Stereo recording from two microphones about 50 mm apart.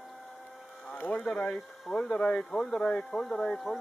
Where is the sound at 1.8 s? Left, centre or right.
Centre.